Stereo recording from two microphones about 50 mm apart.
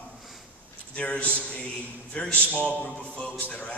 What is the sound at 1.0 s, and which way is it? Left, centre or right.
A man's voice, left.